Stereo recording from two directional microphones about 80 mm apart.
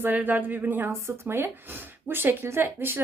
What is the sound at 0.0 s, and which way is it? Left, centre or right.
Speech, right.